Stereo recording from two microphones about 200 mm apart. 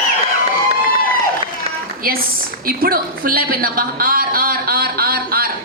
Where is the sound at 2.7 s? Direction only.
45° right (ahead or behind).